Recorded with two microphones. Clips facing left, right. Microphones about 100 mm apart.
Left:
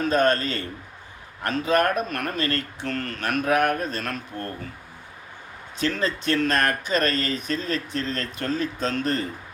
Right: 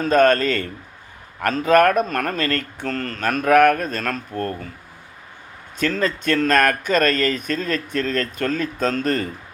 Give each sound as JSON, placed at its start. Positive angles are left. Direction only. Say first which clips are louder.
{"t": 0.1, "sound": "a man's voice", "louder": "right 8 dB", "side_deg": -50}
{"t": 2.0, "sound": "speech", "louder": "right 4 dB", "side_deg": -45}
{"t": 5.8, "sound": "speech", "louder": "right 4 dB", "side_deg": -50}